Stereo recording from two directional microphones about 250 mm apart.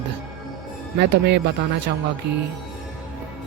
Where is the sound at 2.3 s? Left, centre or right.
Right.